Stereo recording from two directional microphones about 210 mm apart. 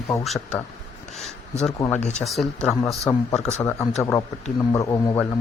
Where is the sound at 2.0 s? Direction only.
30° left (ahead or behind).